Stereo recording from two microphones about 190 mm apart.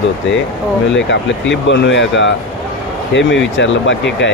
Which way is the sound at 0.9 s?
70° left (ahead or behind).